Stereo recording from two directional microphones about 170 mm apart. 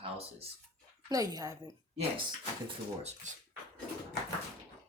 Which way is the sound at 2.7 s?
40° right (ahead or behind).